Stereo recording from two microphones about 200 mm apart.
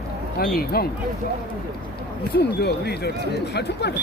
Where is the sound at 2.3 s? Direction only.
55° left (ahead or behind).